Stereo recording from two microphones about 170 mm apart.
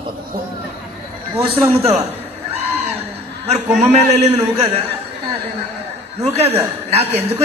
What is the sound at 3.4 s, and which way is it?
A man's voice, 40° right (ahead or behind).